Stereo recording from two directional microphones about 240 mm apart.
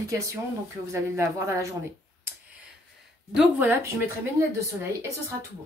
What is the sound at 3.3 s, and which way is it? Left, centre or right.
Speech, centre.